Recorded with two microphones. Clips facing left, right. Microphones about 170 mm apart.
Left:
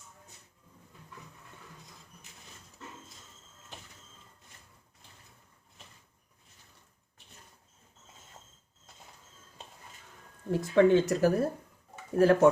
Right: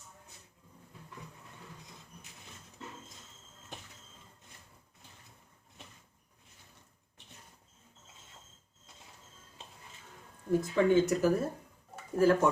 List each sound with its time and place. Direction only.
10.6 s speech: 70° left (ahead or behind)